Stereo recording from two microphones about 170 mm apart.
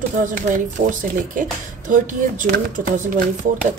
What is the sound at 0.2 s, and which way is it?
Speech, 50° right (ahead or behind).